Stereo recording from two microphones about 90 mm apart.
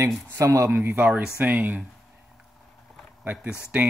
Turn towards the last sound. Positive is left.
turn(degrees=-10)  # may be behind; listen again after turning